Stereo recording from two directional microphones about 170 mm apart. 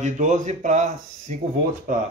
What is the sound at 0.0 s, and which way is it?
Speech, 45° right (ahead or behind).